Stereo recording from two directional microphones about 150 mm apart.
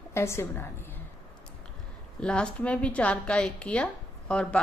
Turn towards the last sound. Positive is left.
turn(degrees=5)  # may be behind; listen again after turning